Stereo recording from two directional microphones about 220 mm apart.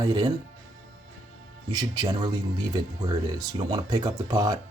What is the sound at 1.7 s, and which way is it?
Speech, 20° right (ahead or behind).